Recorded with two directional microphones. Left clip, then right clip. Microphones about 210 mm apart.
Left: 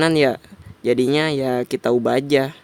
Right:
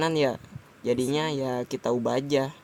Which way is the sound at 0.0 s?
50° left (ahead or behind).